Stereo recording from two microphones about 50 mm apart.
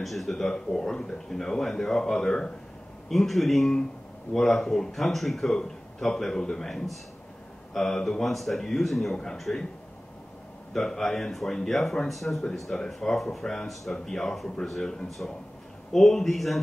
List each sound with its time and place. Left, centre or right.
0.0 s speech: centre
3.1 s a man's voice: centre
9.1 s speech: centre
10.7 s a man's voice: centre